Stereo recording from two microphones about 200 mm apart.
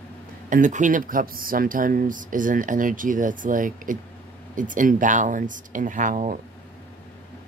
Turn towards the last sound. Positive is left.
turn(degrees=-40)  # may be behind; listen again after turning